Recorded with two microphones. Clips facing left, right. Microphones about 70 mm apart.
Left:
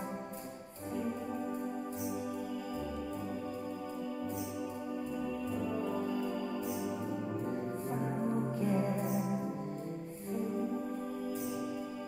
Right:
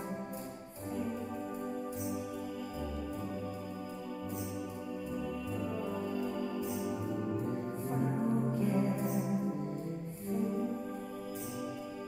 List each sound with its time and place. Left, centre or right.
5.9 s music: left
6.7 s music: centre